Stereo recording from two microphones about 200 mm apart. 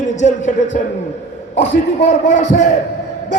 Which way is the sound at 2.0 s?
40° left (ahead or behind).